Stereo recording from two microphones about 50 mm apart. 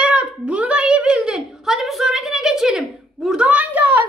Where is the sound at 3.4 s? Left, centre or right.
Right.